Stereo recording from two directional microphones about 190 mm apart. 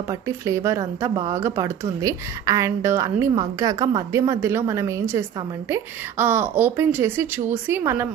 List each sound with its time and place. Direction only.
0.5 s speech: 15° right (ahead or behind)